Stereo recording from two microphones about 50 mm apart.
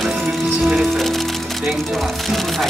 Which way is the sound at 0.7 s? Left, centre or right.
Centre.